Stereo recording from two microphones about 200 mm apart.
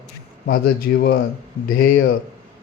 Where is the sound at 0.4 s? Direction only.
50° left (ahead or behind).